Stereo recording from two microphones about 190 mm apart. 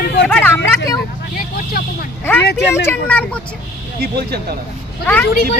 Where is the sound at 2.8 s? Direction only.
10° left (ahead or behind).